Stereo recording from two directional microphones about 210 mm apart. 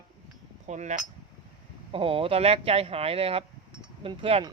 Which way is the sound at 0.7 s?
35° right (ahead or behind).